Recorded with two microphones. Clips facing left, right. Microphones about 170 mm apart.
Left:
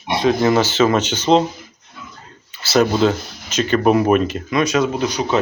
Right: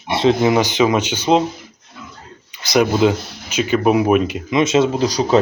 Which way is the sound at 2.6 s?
15° right (ahead or behind).